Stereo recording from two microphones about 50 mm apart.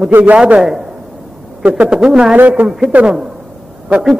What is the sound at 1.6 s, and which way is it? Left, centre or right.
Speech, right.